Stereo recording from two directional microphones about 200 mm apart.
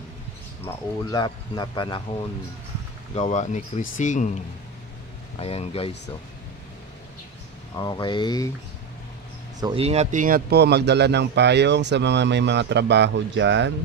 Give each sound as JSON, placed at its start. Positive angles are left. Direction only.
{"t": 0.7, "sound": "speech", "side_deg": 20}
{"t": 3.2, "sound": "speech", "side_deg": 35}
{"t": 5.4, "sound": "speech", "side_deg": 30}
{"t": 7.7, "sound": "speech", "side_deg": 20}
{"t": 9.6, "sound": "speech", "side_deg": -25}